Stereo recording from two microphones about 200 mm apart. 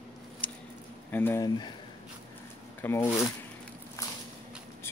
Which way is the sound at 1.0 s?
10° left (ahead or behind).